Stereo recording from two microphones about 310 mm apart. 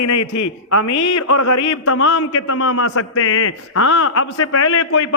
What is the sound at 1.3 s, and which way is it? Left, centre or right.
A man's voice, left.